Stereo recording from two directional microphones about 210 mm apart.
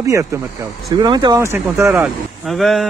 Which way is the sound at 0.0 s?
15° right (ahead or behind).